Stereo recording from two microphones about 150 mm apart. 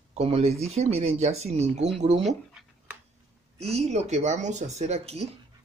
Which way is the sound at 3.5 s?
45° right (ahead or behind).